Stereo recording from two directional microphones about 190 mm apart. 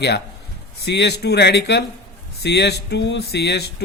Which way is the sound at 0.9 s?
60° left (ahead or behind).